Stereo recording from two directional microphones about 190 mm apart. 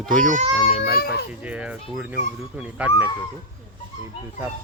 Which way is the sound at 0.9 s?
55° left (ahead or behind).